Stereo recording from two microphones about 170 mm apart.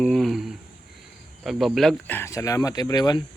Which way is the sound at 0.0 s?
Centre (ahead or behind).